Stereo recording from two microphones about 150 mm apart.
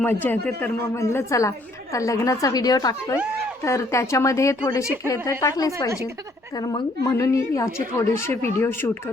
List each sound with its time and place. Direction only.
0.0 s a man's voice: 15° left (ahead or behind)